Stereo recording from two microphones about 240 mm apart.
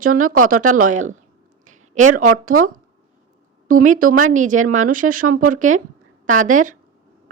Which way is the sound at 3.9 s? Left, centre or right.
Right.